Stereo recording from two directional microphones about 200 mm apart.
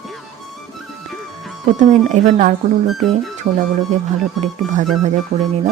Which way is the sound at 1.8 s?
35° right (ahead or behind).